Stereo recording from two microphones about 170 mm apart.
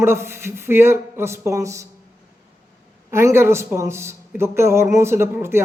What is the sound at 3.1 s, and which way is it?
Speech, 15° right (ahead or behind).